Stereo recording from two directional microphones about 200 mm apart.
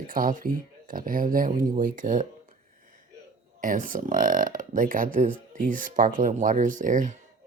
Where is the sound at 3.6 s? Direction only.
45° right (ahead or behind).